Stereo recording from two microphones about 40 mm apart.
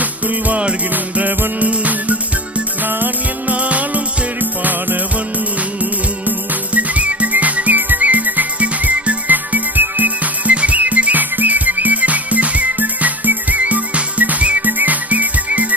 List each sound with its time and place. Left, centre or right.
0.0 s music: right
0.6 s music: right
1.5 s music: right
3.5 s music: right
6.7 s whistle: right
10.5 s music: right